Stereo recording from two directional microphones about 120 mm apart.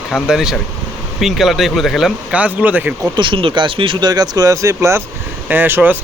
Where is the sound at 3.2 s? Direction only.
45° right (ahead or behind); by 6.0 s 15° right (ahead or behind).